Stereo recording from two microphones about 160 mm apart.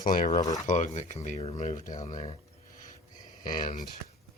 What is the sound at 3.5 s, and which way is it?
Speech, 55° left (ahead or behind).